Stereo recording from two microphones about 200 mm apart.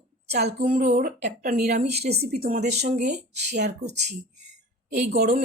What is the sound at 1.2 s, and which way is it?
Speech, 50° right (ahead or behind).